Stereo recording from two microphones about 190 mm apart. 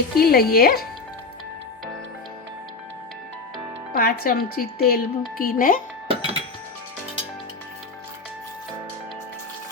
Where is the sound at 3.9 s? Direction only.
55° left (ahead or behind).